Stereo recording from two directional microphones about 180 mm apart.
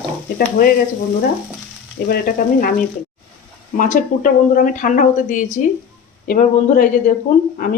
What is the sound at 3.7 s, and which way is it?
Speech, 50° left (ahead or behind).